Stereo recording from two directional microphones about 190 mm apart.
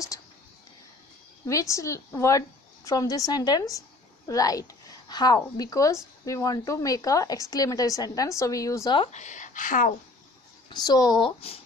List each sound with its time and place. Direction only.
1.4 s a woman's voice: 15° left (ahead or behind)
9.1 s speech: 40° left (ahead or behind)
10.7 s a woman's voice: 20° left (ahead or behind)